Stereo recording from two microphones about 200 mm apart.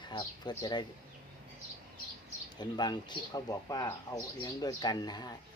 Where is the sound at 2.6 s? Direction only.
20° left (ahead or behind).